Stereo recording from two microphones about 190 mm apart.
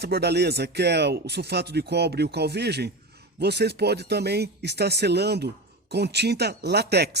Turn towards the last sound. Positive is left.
turn(degrees=-60)  # may be behind; listen again after turning